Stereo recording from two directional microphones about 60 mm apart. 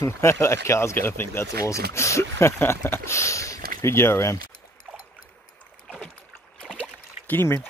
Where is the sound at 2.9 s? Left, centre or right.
Left.